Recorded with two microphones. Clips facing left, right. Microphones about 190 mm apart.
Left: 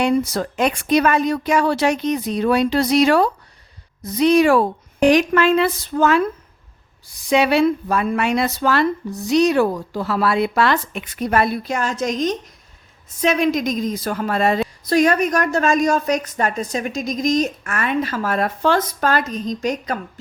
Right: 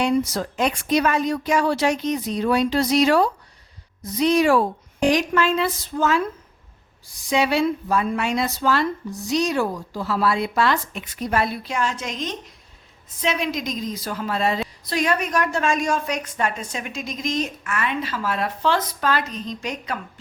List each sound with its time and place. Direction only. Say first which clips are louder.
0.3 s a woman's voice: left 3 dB; 60° left (ahead or behind)
7.3 s a woman's voice: left 4 dB; 65° left (ahead or behind); by 20.0 s 40° left (ahead or behind)